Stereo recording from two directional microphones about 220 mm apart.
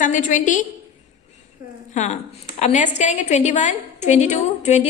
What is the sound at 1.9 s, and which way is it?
A woman's voice, 30° left (ahead or behind).